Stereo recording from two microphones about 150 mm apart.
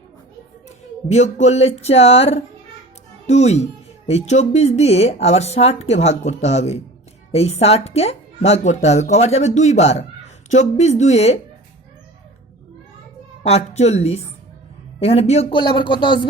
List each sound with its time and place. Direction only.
1.1 s speech: 50° left (ahead or behind)
13.4 s speech: 45° left (ahead or behind)